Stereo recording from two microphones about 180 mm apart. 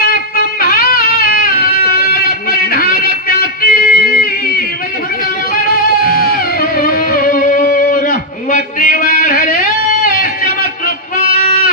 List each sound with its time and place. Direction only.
0.0 s music: 55° left (ahead or behind)
5.7 s music: 55° left (ahead or behind)
10.1 s a sound: 50° left (ahead or behind)